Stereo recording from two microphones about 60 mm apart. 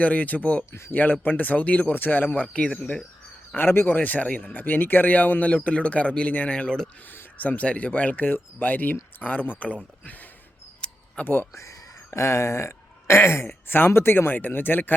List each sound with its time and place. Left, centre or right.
0.0 s speech: left
2.5 s speech: centre
3.5 s speech: left; by 6.8 s centre
7.1 s speech: left
10.8 s a sound: centre
12.1 s speech: left